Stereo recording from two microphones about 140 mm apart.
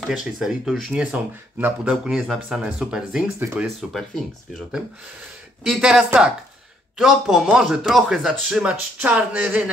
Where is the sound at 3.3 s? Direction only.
15° right (ahead or behind).